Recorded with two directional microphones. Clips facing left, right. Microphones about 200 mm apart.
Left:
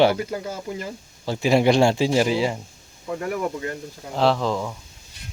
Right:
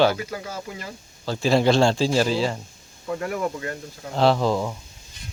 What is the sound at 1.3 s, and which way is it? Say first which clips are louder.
Speech: left 1 dB; 20° left (ahead or behind).